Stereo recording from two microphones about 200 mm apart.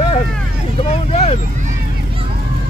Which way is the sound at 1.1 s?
30° left (ahead or behind).